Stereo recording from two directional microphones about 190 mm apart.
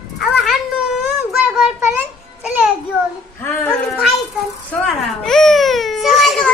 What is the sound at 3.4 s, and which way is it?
Speech, 5° left (ahead or behind).